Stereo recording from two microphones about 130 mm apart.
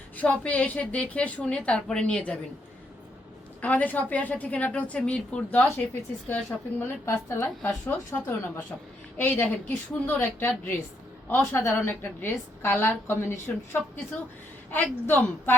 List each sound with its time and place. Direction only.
0.2 s a woman's voice: 10° left (ahead or behind)
3.6 s a woman's voice: 10° left (ahead or behind)